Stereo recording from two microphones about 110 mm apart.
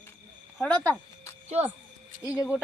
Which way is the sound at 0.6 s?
25° left (ahead or behind).